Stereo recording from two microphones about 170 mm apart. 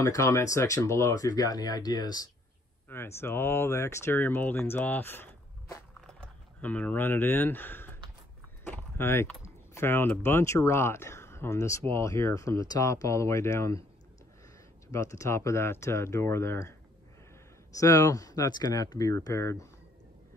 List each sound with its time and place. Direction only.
0.0 s speech: 15° left (ahead or behind)
8.6 s vehicle: 10° left (ahead or behind)
9.8 s speech: 15° left (ahead or behind)
14.9 s speech: 20° left (ahead or behind)
17.7 s speech: 20° left (ahead or behind)